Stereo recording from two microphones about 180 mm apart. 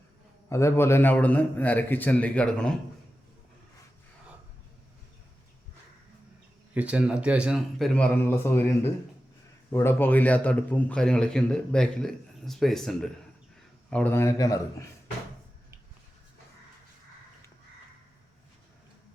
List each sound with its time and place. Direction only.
0.5 s a man's voice: 15° left (ahead or behind)
6.7 s a man's voice: 5° right (ahead or behind); by 14.8 s 20° left (ahead or behind)